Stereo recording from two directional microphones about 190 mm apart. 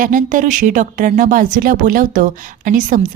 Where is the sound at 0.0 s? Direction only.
45° right (ahead or behind).